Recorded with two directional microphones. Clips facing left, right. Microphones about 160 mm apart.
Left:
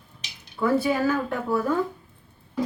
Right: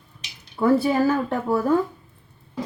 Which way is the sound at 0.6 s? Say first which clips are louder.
Right 4 dB; 30° right (ahead or behind).